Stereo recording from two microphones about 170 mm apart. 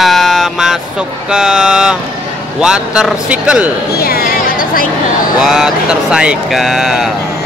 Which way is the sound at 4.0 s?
60° left (ahead or behind).